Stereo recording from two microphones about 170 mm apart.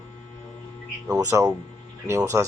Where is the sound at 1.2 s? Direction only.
20° right (ahead or behind).